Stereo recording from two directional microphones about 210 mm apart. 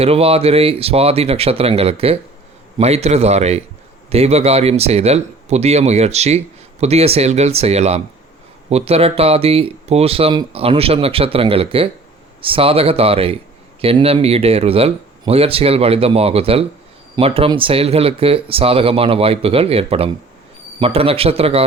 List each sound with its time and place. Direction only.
0.0 s speech: 30° right (ahead or behind)